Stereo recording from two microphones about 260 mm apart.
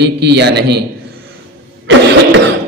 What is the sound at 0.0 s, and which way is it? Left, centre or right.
Speech, right.